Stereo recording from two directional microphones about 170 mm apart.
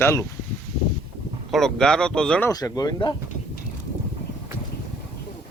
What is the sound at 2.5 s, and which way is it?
Speech, 20° left (ahead or behind).